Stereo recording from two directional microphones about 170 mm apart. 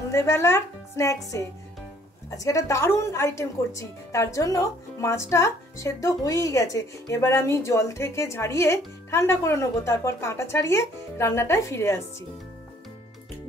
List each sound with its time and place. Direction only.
0.1 s speech: 15° left (ahead or behind)